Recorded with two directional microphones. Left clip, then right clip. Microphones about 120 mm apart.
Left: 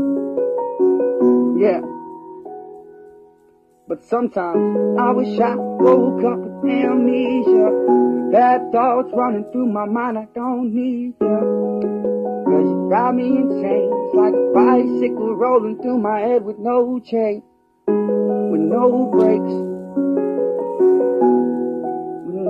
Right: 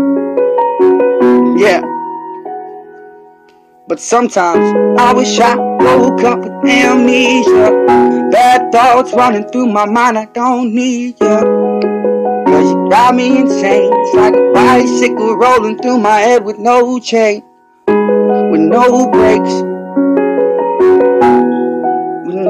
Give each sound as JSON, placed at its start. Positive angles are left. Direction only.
{"t": 0.0, "sound": "music", "side_deg": -35}
{"t": 4.2, "sound": "a sound", "side_deg": -25}
{"t": 8.1, "sound": "music", "side_deg": -30}
{"t": 14.6, "sound": "a sound", "side_deg": -25}
{"t": 17.8, "sound": "music", "side_deg": -30}
{"t": 18.8, "sound": "speech", "side_deg": -35}
{"t": 19.7, "sound": "music", "side_deg": -35}